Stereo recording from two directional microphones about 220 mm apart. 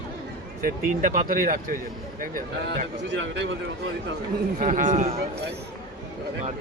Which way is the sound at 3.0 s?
55° right (ahead or behind).